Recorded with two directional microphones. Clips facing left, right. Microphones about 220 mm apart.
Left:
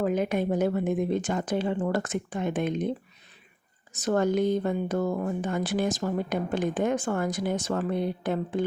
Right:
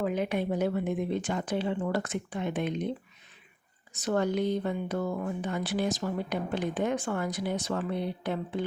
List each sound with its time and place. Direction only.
0.0 s speech: 45° left (ahead or behind)
3.9 s speech: 45° left (ahead or behind)